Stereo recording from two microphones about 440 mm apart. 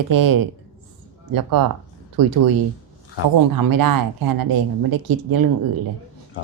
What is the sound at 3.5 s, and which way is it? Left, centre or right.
A woman's voice, right.